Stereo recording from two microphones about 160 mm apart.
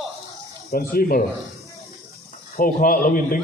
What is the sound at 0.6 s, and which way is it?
Speech, 70° left (ahead or behind).